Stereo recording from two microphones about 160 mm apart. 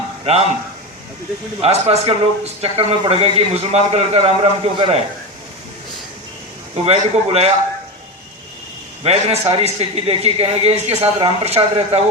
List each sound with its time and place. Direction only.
1.6 s a man's voice: 40° right (ahead or behind)
6.8 s a man's voice: 40° right (ahead or behind)
9.0 s a man's voice: 40° right (ahead or behind)